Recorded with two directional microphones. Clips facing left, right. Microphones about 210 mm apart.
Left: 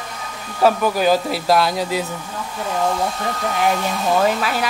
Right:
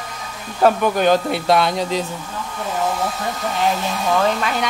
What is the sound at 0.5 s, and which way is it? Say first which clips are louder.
A man's voice: right 1 dB; 5° left (ahead or behind).